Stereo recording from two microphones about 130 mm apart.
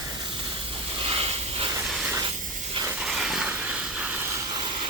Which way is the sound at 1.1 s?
45° right (ahead or behind).